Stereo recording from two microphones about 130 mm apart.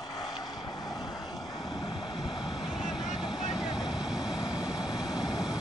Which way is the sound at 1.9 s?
35° left (ahead or behind).